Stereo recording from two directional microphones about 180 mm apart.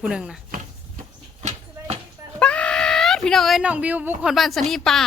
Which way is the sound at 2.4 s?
5° left (ahead or behind).